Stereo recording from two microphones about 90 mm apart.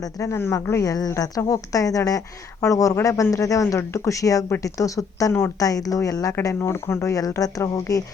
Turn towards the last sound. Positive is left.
turn(degrees=40)  # may be behind; listen again after turning